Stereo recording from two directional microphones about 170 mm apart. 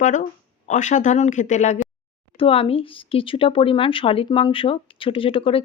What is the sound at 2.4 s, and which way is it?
Speech, 35° left (ahead or behind).